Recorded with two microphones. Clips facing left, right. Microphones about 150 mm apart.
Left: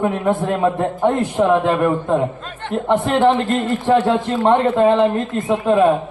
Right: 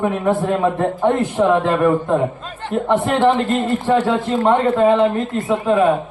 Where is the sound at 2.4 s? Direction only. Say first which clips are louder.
Right 1 dB; 5° right (ahead or behind).